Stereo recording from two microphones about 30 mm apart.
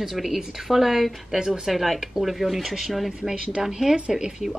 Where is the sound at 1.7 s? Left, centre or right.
Centre.